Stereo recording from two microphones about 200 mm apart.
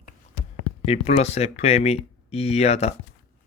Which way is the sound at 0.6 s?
30° left (ahead or behind).